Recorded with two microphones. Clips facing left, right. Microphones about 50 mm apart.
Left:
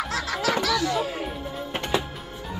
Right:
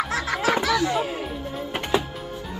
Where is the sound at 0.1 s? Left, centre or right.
Right.